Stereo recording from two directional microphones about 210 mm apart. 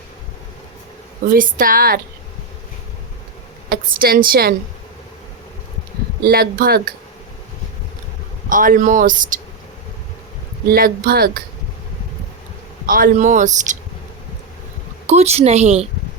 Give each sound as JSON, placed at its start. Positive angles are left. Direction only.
{"t": 1.3, "sound": "speech", "side_deg": -40}
{"t": 3.7, "sound": "a woman's voice", "side_deg": -45}
{"t": 6.2, "sound": "a woman's voice", "side_deg": -45}
{"t": 8.4, "sound": "speech", "side_deg": -40}
{"t": 10.7, "sound": "a woman's voice", "side_deg": -45}
{"t": 12.8, "sound": "speech", "side_deg": -40}
{"t": 15.0, "sound": "speech", "side_deg": -30}